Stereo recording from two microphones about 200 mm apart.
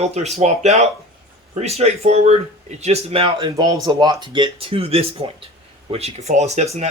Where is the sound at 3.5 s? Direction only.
15° right (ahead or behind); by 6.8 s 35° right (ahead or behind).